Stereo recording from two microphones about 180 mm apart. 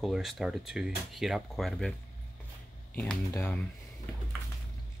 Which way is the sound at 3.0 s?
10° left (ahead or behind).